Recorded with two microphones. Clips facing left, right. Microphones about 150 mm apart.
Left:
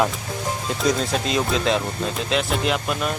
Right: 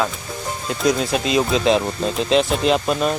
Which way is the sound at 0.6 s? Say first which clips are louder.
Right 3 dB; 5° right (ahead or behind).